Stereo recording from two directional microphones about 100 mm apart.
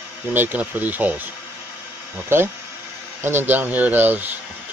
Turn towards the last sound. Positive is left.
turn(degrees=-20)  # may be behind; listen again after turning